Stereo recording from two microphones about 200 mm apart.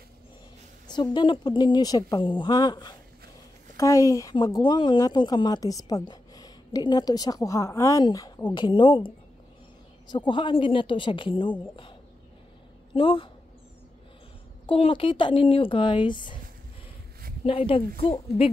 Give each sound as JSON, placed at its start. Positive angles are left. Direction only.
{"t": 1.1, "sound": "speech", "side_deg": 25}
{"t": 12.9, "sound": "speech", "side_deg": 25}
{"t": 14.7, "sound": "speech", "side_deg": 25}
{"t": 17.5, "sound": "speech", "side_deg": 25}